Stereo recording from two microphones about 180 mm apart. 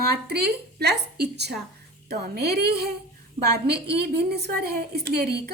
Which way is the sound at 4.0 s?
65° right (ahead or behind).